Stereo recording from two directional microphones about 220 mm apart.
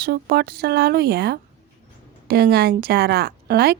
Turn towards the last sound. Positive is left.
turn(degrees=-45)  # may be behind; listen again after turning